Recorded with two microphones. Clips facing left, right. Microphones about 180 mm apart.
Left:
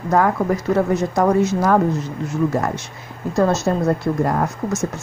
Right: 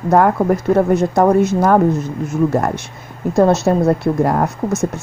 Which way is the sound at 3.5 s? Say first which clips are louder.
Right 5 dB; 65° right (ahead or behind).